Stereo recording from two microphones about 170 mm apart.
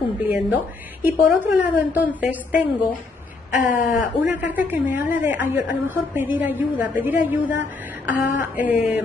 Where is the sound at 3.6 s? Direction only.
50° left (ahead or behind).